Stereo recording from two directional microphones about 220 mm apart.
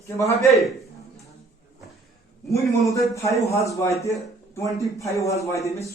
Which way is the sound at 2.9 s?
15° left (ahead or behind).